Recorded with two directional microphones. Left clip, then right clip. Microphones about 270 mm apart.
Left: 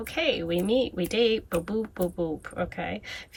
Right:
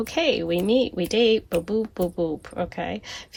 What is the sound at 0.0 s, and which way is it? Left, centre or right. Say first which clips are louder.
Speech: right 4 dB; centre.